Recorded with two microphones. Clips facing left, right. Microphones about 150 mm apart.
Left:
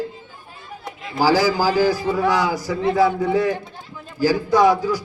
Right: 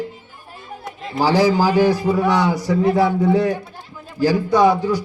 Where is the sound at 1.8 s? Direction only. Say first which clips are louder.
Right 2 dB; 65° right (ahead or behind).